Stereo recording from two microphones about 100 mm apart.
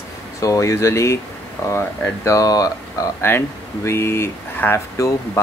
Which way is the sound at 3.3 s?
25° left (ahead or behind).